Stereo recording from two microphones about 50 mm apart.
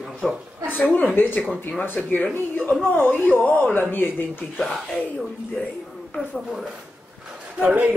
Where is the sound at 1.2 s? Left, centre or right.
Left.